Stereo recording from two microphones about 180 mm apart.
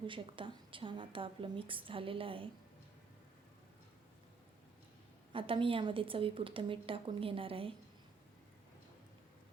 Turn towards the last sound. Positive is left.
turn(degrees=-30)  # may be behind; listen again after turning